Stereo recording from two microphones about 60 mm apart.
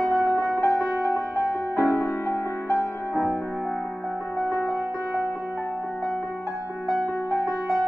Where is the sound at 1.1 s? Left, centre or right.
Right.